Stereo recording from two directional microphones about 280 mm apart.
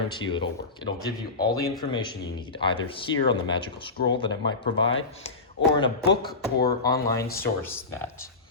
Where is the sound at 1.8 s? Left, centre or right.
Centre.